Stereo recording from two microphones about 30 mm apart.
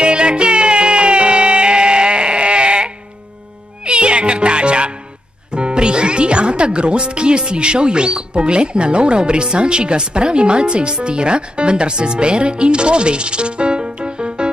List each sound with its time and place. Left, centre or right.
0.0 s music: right
5.5 s speech: right